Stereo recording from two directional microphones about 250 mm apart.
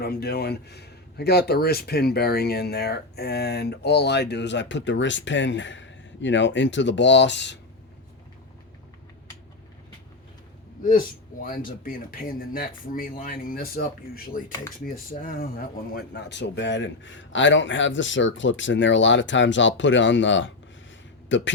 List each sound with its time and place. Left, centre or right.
0.0 s speech: left
11.4 s speech: left
14.8 s a man's voice: left